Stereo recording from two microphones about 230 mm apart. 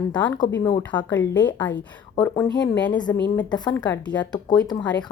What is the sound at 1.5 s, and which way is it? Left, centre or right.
Speech, centre.